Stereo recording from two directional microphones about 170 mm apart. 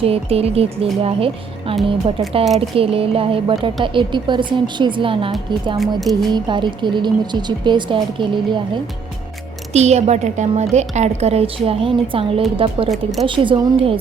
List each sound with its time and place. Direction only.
0.0 s a woman's voice: 35° right (ahead or behind)
5.8 s speech: centre (ahead or behind)
6.3 s a woman's voice: 25° right (ahead or behind)
9.7 s a woman's voice: 40° right (ahead or behind)
12.9 s speech: centre (ahead or behind)
13.2 s a woman's voice: 30° right (ahead or behind)